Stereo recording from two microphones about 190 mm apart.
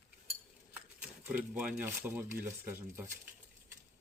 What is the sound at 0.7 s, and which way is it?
Speech, 10° right (ahead or behind).